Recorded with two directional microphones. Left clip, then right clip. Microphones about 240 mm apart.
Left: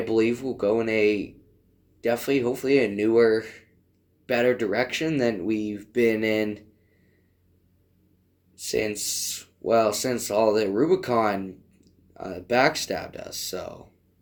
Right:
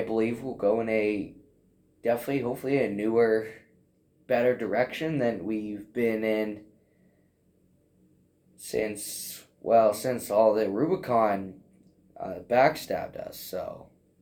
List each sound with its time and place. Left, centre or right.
0.1 s speech: left
8.5 s speech: left